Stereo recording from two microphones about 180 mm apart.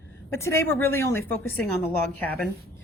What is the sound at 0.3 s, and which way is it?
A woman's voice, 15° left (ahead or behind).